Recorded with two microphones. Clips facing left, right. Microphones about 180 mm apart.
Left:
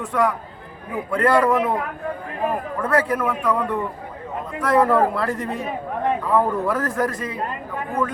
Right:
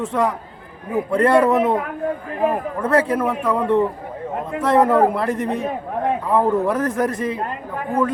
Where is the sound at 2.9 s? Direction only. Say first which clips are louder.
Right 3 dB; 25° right (ahead or behind).